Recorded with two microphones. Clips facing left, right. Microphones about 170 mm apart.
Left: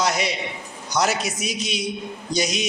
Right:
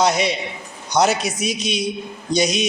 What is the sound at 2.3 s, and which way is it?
Speech, 20° right (ahead or behind).